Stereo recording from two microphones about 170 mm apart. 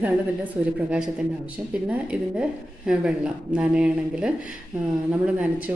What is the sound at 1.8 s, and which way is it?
A woman's voice, 5° right (ahead or behind).